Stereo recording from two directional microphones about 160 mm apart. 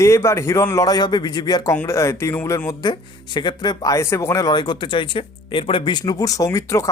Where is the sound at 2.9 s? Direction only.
30° left (ahead or behind).